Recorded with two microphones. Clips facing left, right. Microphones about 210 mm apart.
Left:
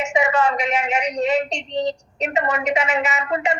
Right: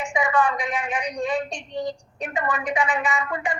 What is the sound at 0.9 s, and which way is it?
A woman's voice, 75° left (ahead or behind).